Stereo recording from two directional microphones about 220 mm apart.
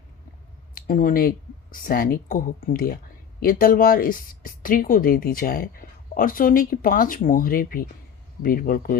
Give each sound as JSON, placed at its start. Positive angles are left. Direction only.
{"t": 0.7, "sound": "speech", "side_deg": 40}